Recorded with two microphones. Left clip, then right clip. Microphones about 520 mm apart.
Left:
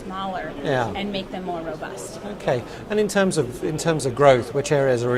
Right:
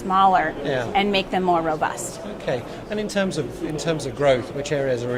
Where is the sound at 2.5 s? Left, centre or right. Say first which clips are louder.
Left 3 dB; left.